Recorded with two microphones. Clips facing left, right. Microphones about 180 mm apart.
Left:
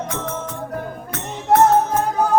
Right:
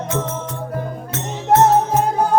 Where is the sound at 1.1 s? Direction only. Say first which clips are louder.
Right 1 dB; 25° right (ahead or behind).